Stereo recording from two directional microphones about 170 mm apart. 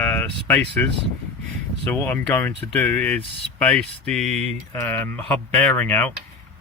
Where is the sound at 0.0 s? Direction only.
10° left (ahead or behind).